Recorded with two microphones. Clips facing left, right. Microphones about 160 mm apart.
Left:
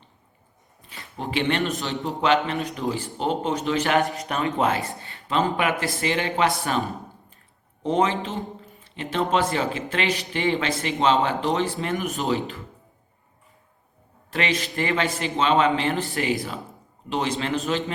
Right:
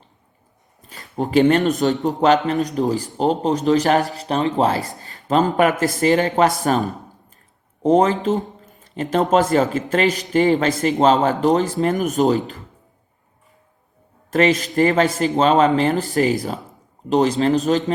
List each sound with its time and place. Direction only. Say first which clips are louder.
0.8 s a man's voice: right 9 dB; 40° right (ahead or behind)
6.6 s a sound: right 6 dB; 40° right (ahead or behind)
7.8 s speech: right 7 dB; 40° right (ahead or behind)
14.3 s speech: right 9 dB; 45° right (ahead or behind)